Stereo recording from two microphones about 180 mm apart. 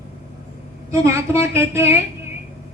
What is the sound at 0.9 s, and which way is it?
A woman's voice, 15° right (ahead or behind).